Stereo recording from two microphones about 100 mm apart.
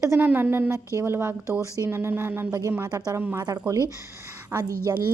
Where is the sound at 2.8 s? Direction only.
35° right (ahead or behind).